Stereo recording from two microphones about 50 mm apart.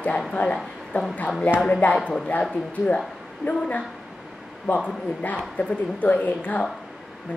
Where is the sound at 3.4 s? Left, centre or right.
Left.